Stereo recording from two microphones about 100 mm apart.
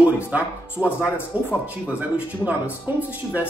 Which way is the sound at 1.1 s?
20° left (ahead or behind).